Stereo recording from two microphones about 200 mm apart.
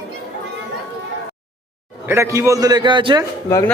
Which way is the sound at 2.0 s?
15° right (ahead or behind).